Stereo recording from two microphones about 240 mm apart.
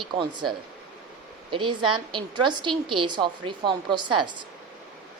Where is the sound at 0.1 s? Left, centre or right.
Centre.